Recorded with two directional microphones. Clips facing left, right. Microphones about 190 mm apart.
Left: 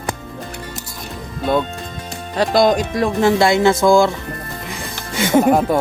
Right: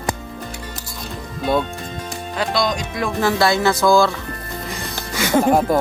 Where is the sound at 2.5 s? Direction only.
55° left (ahead or behind).